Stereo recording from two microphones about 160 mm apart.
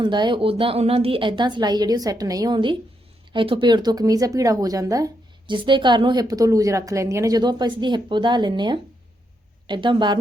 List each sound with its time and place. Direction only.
0.0 s a woman's voice: 30° right (ahead or behind)